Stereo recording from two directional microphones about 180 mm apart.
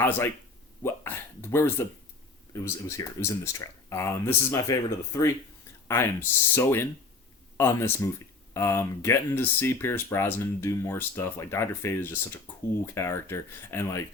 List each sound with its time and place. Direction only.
0.0 s speech: 10° left (ahead or behind)